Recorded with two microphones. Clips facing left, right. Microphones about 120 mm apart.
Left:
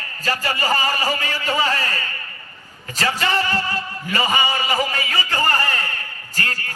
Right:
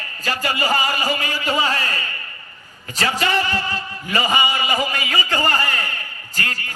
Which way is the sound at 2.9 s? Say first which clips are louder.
Right 1 dB; 20° right (ahead or behind).